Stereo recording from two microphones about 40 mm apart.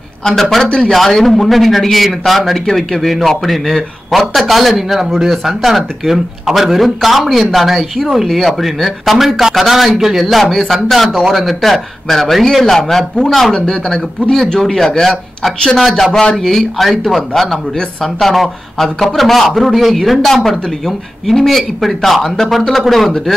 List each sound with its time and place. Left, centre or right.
0.2 s a man's voice: centre
0.9 s speech: centre